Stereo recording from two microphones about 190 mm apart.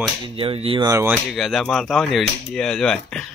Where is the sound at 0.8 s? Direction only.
15° right (ahead or behind).